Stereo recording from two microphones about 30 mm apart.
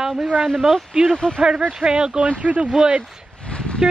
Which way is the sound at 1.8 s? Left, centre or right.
Right.